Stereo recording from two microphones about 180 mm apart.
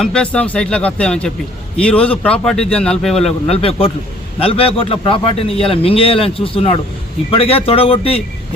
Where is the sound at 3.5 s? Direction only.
35° left (ahead or behind).